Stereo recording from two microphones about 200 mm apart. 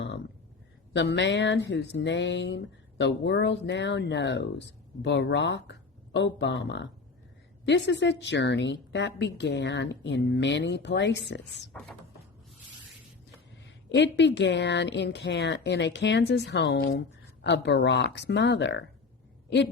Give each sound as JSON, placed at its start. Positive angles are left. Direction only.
{"t": 0.9, "sound": "a woman's voice", "side_deg": 60}
{"t": 11.7, "sound": "speech", "side_deg": 5}
{"t": 13.7, "sound": "a woman's voice", "side_deg": 60}